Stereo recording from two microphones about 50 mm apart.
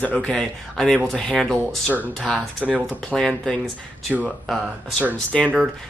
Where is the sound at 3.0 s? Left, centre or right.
Centre.